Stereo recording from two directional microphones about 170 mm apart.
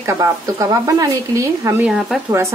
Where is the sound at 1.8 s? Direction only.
5° right (ahead or behind).